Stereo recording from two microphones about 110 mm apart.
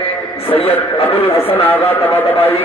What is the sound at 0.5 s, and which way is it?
Speech, 60° left (ahead or behind).